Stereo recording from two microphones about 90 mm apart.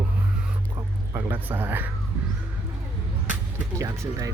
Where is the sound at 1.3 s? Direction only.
20° right (ahead or behind).